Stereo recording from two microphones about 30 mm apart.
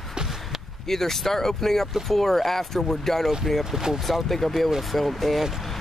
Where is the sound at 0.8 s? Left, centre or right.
Centre.